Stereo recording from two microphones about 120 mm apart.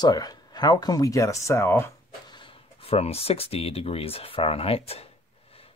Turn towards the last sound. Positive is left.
turn(degrees=55)  # may be behind; listen again after turning